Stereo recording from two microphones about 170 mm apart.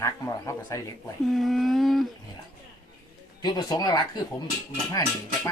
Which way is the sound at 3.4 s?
25° left (ahead or behind).